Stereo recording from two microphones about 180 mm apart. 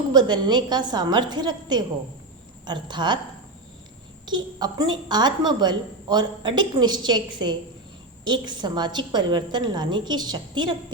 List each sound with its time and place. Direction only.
0.1 s a woman's voice: 25° right (ahead or behind)
4.3 s a woman's voice: 25° right (ahead or behind)